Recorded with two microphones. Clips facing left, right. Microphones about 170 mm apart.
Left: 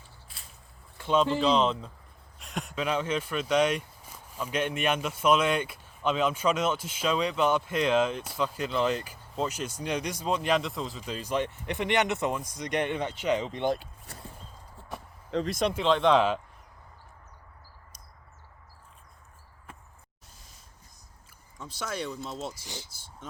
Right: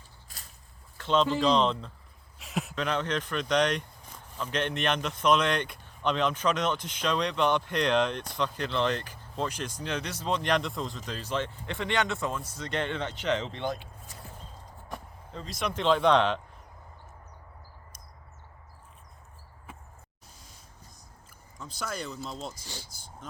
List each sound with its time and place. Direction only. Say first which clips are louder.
0.3 s a sound: right 4 dB; 45° right (ahead or behind)
0.9 s speech: left 1 dB; 10° left (ahead or behind)
2.4 s a sound: right 3 dB; centre (ahead or behind)
2.7 s speech: left 2 dB; 10° left (ahead or behind)
14.1 s a sound: left 4 dB; 60° left (ahead or behind)
15.3 s speech: left 12 dB; 75° left (ahead or behind)
15.7 s speech: right 1 dB; centre (ahead or behind)
21.6 s speech: left 2 dB; 5° left (ahead or behind)
22.6 s speech: left 2 dB; 20° left (ahead or behind)